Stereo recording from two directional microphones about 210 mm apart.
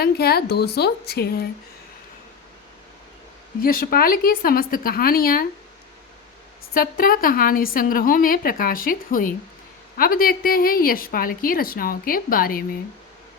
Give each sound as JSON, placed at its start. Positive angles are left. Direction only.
{"t": 0.0, "sound": "a woman's voice", "side_deg": 50}
{"t": 3.6, "sound": "a woman's voice", "side_deg": 45}
{"t": 6.7, "sound": "a woman's voice", "side_deg": 45}